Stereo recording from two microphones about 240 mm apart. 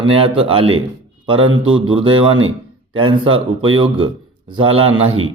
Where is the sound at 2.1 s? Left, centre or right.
Right.